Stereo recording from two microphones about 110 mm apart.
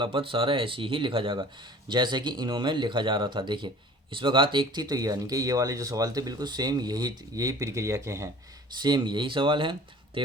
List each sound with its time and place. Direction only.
0.0 s speech: 50° right (ahead or behind); by 8.3 s 25° right (ahead or behind)
8.8 s speech: 45° right (ahead or behind)